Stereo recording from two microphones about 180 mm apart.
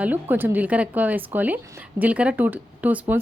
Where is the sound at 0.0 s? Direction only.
10° right (ahead or behind).